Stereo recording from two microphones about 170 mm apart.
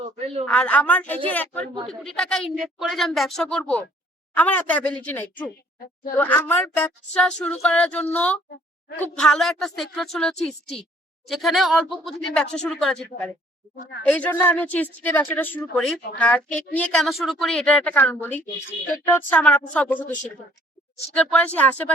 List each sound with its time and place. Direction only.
0.0 s a sound: 35° right (ahead or behind)
0.4 s speech: 5° left (ahead or behind)
21.3 s speech: 10° left (ahead or behind)